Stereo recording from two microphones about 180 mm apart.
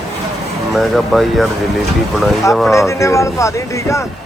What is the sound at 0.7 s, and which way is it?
Speech, centre (ahead or behind).